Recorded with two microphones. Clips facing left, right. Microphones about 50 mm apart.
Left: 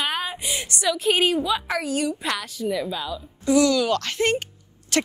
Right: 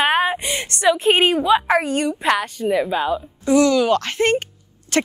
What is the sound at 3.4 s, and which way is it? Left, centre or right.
Speech, right.